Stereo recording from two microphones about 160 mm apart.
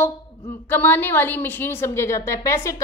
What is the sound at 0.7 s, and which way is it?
A woman's voice, 10° left (ahead or behind).